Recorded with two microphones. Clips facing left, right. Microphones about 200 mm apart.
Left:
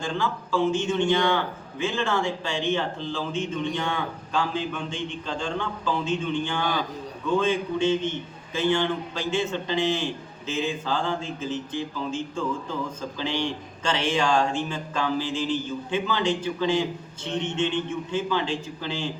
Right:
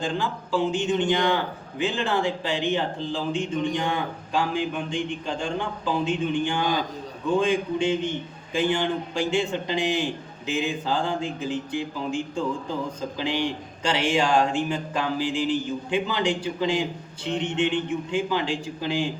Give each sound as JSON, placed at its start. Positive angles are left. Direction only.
{"t": 0.0, "sound": "a man's voice", "side_deg": -15}